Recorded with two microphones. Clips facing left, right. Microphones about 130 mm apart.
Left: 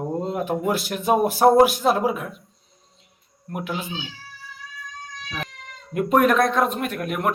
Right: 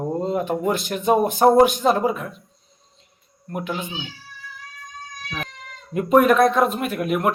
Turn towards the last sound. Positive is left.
turn(degrees=-5)  # may be behind; listen again after turning